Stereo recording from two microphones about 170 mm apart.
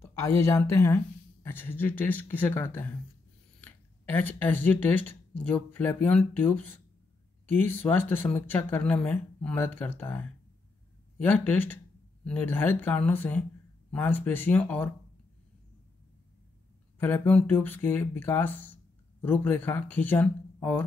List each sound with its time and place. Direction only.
0.0 s speech: 15° left (ahead or behind)
17.0 s speech: 10° left (ahead or behind)